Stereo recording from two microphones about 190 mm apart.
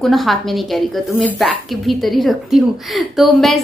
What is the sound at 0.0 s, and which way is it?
A woman's voice, centre (ahead or behind).